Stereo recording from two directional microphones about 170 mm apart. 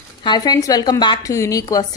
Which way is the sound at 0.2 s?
25° left (ahead or behind).